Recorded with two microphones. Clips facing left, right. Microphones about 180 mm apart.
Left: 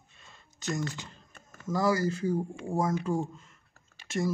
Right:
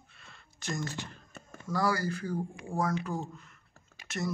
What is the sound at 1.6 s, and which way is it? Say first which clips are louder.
Speech: left 3 dB; 20° left (ahead or behind).